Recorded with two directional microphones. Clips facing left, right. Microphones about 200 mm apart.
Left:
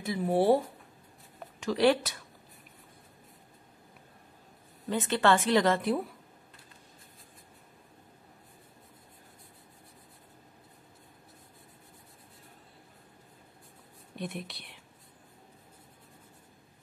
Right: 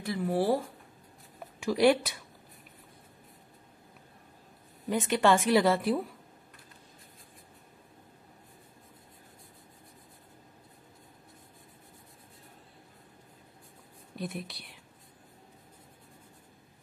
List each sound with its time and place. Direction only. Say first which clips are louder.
0.0 s speech: left 2 dB; 20° left (ahead or behind)
1.6 s a woman's voice: right 1 dB; 10° right (ahead or behind)
4.8 s a woman's voice: right 1 dB; 15° right (ahead or behind)
14.1 s speech: right 1 dB; centre (ahead or behind)